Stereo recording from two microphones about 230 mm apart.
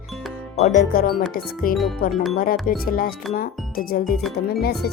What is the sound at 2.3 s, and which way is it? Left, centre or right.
Speech, left.